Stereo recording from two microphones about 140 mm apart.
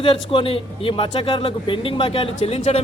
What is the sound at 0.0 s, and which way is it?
A man's voice, 40° left (ahead or behind).